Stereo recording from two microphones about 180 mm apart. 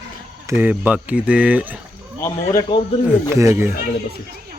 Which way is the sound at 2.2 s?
20° left (ahead or behind).